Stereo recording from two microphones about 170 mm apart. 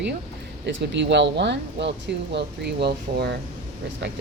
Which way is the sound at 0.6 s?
90° right.